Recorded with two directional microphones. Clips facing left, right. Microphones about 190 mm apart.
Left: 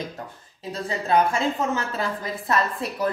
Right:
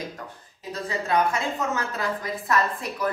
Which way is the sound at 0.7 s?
30° left (ahead or behind).